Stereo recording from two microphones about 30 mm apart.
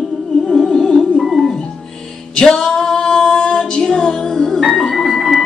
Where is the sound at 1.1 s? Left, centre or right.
Centre.